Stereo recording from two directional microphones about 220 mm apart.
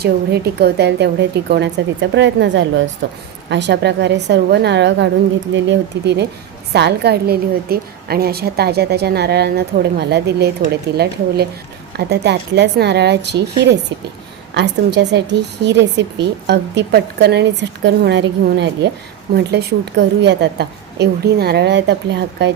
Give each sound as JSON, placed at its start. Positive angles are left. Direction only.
{"t": 0.0, "sound": "a woman's voice", "side_deg": -45}